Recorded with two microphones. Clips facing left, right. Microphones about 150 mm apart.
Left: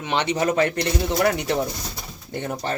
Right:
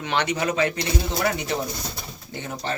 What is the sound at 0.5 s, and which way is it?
A man's voice, 55° left (ahead or behind).